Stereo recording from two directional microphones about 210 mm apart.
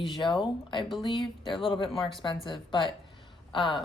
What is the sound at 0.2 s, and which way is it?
A woman's voice, 20° left (ahead or behind).